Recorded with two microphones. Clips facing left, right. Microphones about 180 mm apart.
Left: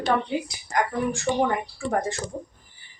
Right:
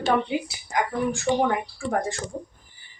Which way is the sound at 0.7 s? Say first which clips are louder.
Even; centre (ahead or behind).